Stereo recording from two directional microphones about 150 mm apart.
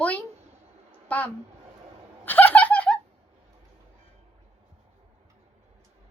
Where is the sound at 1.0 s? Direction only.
10° left (ahead or behind).